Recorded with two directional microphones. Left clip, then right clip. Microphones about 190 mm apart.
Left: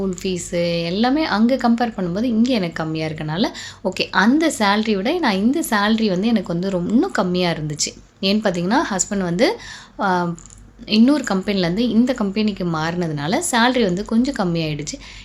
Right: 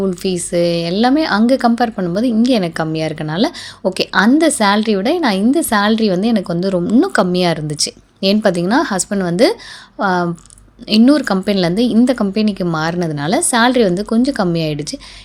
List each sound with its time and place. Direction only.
0.0 s a woman's voice: 30° right (ahead or behind)